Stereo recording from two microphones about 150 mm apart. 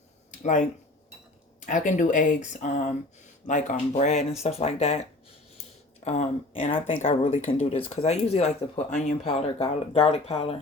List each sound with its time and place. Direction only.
0.3 s a sound: 55° left (ahead or behind)
1.6 s speech: 55° left (ahead or behind)
6.1 s speech: 40° left (ahead or behind)